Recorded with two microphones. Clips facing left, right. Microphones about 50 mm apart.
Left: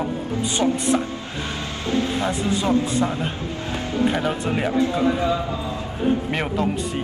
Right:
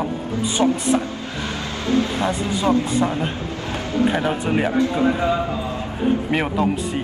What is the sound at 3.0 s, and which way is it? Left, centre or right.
Speech, right.